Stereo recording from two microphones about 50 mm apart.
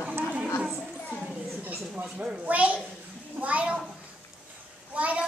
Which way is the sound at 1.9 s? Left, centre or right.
Centre.